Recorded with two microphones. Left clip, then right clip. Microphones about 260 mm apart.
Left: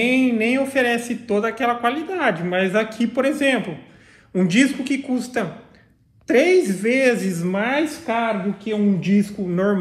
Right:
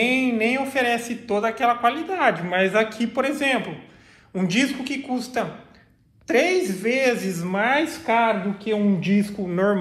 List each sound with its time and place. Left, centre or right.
0.0 s a woman's voice: right